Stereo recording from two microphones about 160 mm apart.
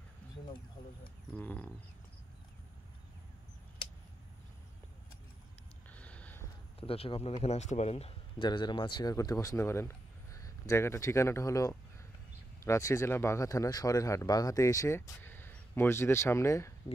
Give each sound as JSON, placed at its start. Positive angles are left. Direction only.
{"t": 1.3, "sound": "speech", "side_deg": 10}
{"t": 5.9, "sound": "a sound", "side_deg": 10}
{"t": 6.8, "sound": "speech", "side_deg": 35}
{"t": 8.5, "sound": "speech", "side_deg": 30}